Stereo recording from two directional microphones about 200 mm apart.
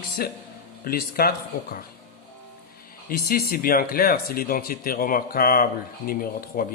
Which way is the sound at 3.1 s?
50° left (ahead or behind).